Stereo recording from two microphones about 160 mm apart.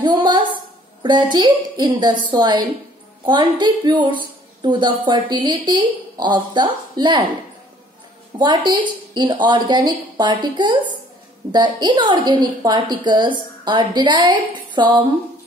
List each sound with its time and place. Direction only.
0.0 s a sound: 30° right (ahead or behind)
1.0 s a woman's voice: 30° right (ahead or behind)
8.4 s a woman's voice: 25° right (ahead or behind)